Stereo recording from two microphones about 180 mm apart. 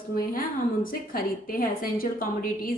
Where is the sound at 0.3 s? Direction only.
50° left (ahead or behind).